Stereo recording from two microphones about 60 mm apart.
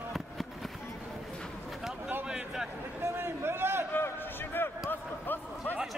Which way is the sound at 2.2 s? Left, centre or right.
Centre.